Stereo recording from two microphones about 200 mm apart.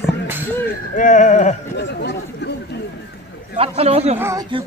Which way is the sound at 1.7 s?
60° left (ahead or behind).